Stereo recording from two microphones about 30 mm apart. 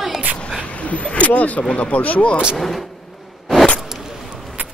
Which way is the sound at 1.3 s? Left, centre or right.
Left.